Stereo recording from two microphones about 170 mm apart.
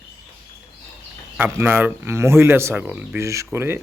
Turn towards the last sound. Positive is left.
turn(degrees=-15)  # may be behind; listen again after turning